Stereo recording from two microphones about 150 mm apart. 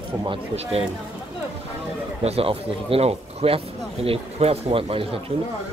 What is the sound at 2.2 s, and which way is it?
Speech, 40° right (ahead or behind).